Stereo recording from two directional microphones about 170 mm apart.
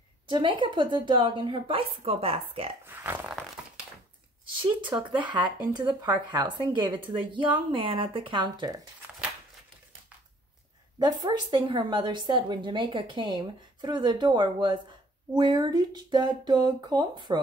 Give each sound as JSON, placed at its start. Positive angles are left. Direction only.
{"t": 0.3, "sound": "a woman's voice", "side_deg": -30}
{"t": 2.8, "sound": "speech", "side_deg": -15}
{"t": 3.6, "sound": "a sound", "side_deg": -5}
{"t": 5.1, "sound": "a woman's voice", "side_deg": -25}
{"t": 11.0, "sound": "a woman's voice", "side_deg": -25}